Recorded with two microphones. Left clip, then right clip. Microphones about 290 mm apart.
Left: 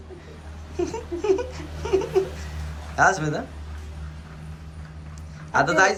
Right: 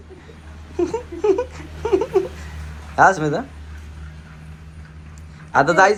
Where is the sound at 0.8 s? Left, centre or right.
Centre.